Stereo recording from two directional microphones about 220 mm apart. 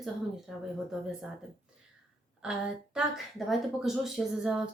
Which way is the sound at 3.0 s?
Centre (ahead or behind).